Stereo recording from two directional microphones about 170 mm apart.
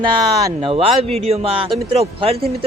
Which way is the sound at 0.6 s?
35° right (ahead or behind).